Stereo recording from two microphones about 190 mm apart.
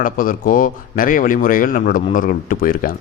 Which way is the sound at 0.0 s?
45° left (ahead or behind).